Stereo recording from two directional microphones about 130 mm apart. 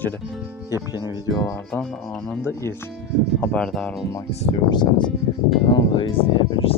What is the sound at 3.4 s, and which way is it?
Speech, 10° left (ahead or behind).